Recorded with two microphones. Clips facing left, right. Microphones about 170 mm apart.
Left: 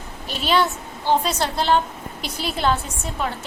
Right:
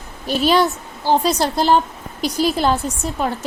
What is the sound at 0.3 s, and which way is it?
A woman's voice, 40° right (ahead or behind).